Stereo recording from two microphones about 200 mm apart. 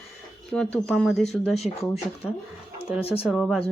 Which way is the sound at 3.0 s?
30° left (ahead or behind).